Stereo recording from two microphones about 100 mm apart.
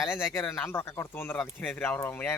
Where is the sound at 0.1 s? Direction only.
25° left (ahead or behind).